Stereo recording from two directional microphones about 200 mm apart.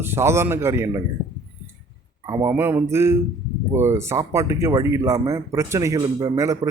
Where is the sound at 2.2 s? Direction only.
20° right (ahead or behind).